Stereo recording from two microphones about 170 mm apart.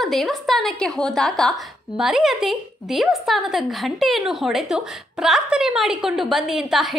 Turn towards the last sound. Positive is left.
turn(degrees=0)  # may be behind; listen again after turning